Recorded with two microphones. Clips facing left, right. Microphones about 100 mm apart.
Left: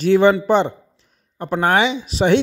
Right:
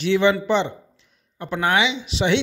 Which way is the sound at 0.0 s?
45° left (ahead or behind).